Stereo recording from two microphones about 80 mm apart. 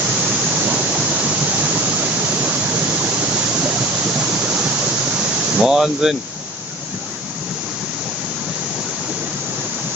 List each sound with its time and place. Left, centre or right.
0.6 s waterfall: centre
5.6 s speech: centre